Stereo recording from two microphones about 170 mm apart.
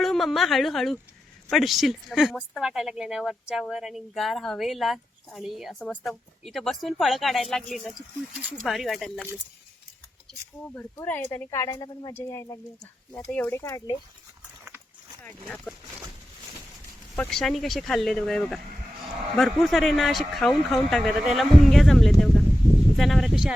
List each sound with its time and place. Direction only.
0.0 s a woman's voice: centre (ahead or behind)
10.8 s speech: 10° left (ahead or behind)
15.7 s speech: 10° left (ahead or behind)
17.2 s speech: centre (ahead or behind)